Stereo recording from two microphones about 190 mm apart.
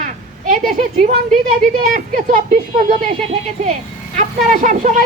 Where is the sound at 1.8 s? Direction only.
45° right (ahead or behind).